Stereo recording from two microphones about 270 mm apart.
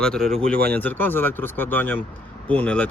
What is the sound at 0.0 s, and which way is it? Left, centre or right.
Speech, centre.